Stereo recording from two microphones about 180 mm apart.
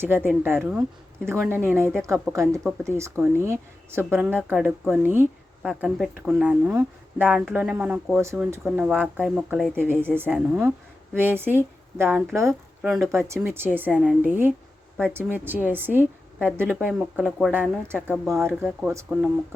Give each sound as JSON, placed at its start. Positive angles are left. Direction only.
{"t": 0.0, "sound": "speech", "side_deg": -10}
{"t": 8.2, "sound": "speech", "side_deg": -15}
{"t": 8.6, "sound": "speech", "side_deg": -5}
{"t": 10.2, "sound": "speech", "side_deg": -10}
{"t": 12.8, "sound": "speech", "side_deg": 0}
{"t": 13.1, "sound": "speech", "side_deg": -15}
{"t": 13.9, "sound": "speech", "side_deg": 0}
{"t": 15.1, "sound": "speech", "side_deg": -10}